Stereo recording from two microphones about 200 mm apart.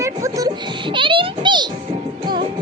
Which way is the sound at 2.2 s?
25° right (ahead or behind).